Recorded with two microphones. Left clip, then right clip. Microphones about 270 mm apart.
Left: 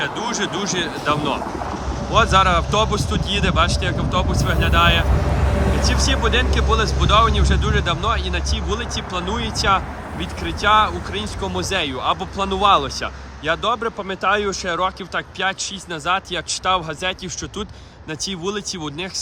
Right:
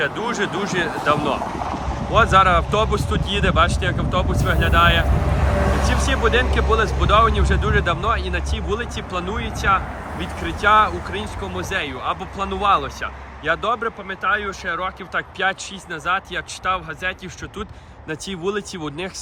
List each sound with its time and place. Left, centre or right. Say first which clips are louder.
0.0 s speech: right 1 dB; centre
1.5 s boat: right 1 dB; right
2.1 s speech: right 1 dB; centre
18.3 s speech: right 2 dB; centre